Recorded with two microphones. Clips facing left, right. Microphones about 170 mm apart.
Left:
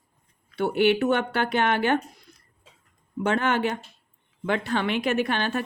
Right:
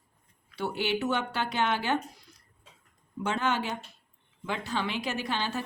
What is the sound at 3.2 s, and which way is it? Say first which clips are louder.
Speech: left 6 dB; 60° left (ahead or behind).